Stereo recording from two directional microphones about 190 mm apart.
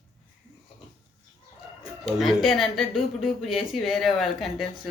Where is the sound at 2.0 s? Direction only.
Centre (ahead or behind).